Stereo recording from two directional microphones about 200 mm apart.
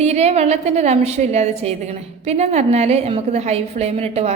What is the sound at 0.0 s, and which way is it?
A woman's voice, 35° right (ahead or behind).